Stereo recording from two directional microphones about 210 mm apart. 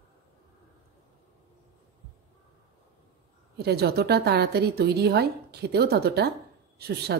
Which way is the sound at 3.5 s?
50° right (ahead or behind).